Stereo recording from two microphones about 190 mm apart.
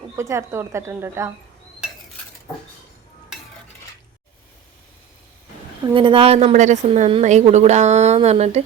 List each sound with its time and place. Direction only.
0.2 s speech: 15° right (ahead or behind)
5.9 s a woman's voice: 25° right (ahead or behind)